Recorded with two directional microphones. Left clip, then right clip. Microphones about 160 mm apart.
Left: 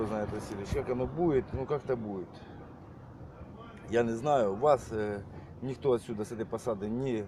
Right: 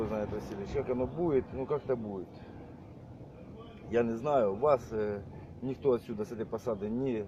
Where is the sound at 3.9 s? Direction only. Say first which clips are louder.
Left 1 dB; 35° left (ahead or behind).